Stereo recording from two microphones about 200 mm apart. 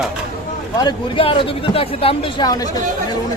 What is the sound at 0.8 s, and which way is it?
A man's voice, 25° left (ahead or behind).